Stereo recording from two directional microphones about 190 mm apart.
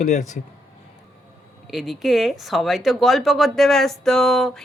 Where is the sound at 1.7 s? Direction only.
Centre (ahead or behind).